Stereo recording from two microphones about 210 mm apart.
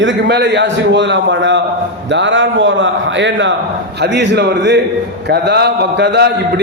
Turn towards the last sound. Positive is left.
turn(degrees=-55)  # may be behind; listen again after turning